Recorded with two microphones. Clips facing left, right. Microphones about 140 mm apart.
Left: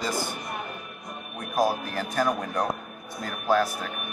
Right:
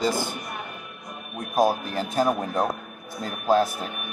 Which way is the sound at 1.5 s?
25° right (ahead or behind).